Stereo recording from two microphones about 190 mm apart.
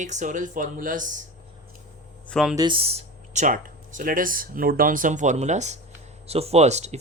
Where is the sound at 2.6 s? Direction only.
25° right (ahead or behind).